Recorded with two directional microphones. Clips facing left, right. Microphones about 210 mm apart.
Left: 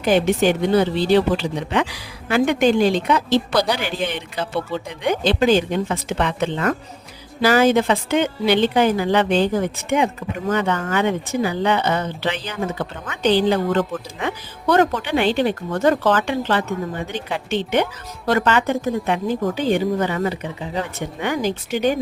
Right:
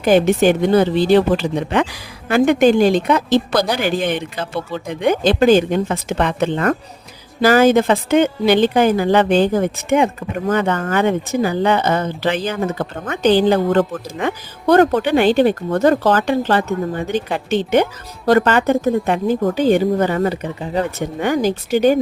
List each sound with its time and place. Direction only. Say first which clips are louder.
0.0 s a woman's voice: right 4 dB; 50° right (ahead or behind)